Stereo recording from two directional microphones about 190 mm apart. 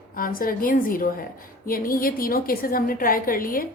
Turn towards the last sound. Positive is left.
turn(degrees=50)  # may be behind; listen again after turning